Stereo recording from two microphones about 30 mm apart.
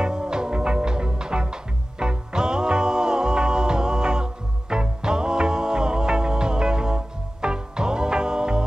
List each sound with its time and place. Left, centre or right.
0.0 s music: right